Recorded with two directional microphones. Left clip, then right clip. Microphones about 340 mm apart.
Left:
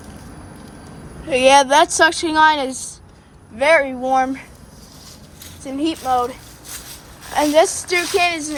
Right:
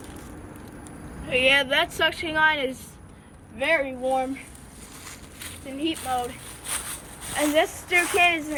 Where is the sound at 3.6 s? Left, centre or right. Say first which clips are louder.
Left 9 dB; left.